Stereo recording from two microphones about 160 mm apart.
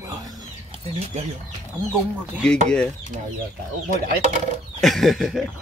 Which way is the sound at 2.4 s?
5° left (ahead or behind).